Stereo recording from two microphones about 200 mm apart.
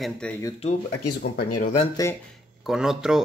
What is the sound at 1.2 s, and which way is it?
Speech, 50° left (ahead or behind).